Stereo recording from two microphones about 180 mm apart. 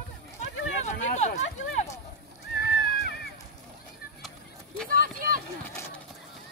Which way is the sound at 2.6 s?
60° left (ahead or behind).